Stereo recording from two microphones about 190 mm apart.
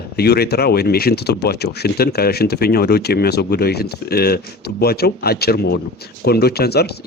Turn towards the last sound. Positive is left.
turn(degrees=55)  # may be behind; listen again after turning